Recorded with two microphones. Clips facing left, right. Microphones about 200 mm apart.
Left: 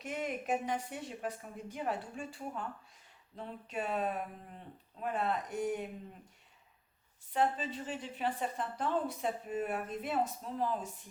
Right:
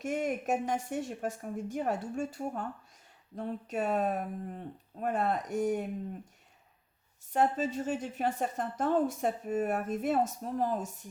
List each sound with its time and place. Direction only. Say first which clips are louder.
0.0 s a woman's voice: right 6 dB; 45° right (ahead or behind)
7.3 s a woman's voice: right 4 dB; 45° right (ahead or behind)